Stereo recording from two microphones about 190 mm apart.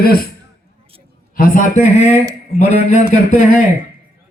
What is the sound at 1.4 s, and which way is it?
Speech, 45° left (ahead or behind).